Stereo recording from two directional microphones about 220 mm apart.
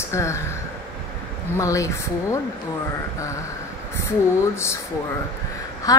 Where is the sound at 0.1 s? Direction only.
15° left (ahead or behind).